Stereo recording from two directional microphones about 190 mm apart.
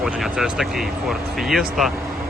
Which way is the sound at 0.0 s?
Centre (ahead or behind).